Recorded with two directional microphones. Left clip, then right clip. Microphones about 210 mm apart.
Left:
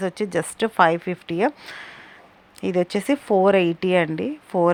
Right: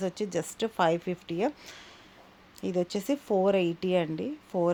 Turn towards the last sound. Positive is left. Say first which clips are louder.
# left 8 dB
turn(degrees=15)  # may be behind; listen again after turning